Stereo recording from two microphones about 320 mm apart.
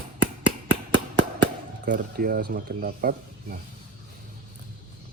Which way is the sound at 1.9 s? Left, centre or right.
Right.